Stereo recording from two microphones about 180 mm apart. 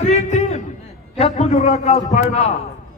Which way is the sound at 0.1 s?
35° left (ahead or behind).